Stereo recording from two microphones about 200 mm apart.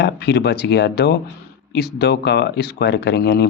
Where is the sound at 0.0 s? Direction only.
55° left (ahead or behind).